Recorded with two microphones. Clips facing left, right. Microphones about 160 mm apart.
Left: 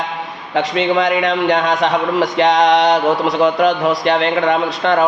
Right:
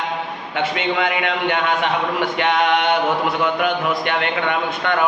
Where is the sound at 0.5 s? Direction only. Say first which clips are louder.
Left 6 dB; 35° left (ahead or behind).